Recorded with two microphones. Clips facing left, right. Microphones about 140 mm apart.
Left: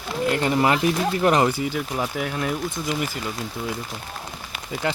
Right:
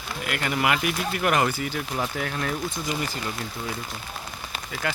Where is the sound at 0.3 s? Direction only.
25° left (ahead or behind).